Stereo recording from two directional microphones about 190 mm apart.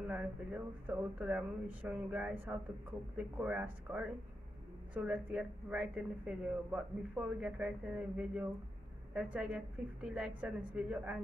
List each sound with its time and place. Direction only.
0.1 s a woman's voice: 10° right (ahead or behind)